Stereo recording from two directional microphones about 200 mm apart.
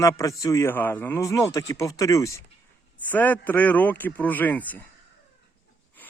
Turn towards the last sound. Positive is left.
turn(degrees=10)  # may be behind; listen again after turning